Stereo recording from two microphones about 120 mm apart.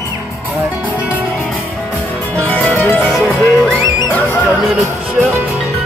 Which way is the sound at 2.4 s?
15° left (ahead or behind).